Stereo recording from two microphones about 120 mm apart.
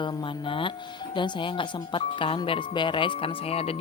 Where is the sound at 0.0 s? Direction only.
45° left (ahead or behind).